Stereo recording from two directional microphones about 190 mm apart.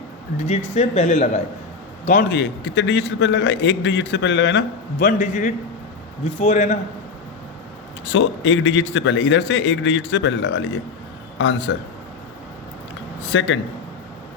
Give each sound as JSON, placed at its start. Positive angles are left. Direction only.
{"t": 0.3, "sound": "speech", "side_deg": 35}
{"t": 2.3, "sound": "a man's voice", "side_deg": 70}
{"t": 4.9, "sound": "a man's voice", "side_deg": 45}
{"t": 8.1, "sound": "a man's voice", "side_deg": 80}
{"t": 13.3, "sound": "a man's voice", "side_deg": 85}